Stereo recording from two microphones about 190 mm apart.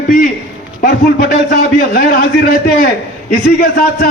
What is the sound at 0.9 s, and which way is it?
A man's voice, 55° left (ahead or behind).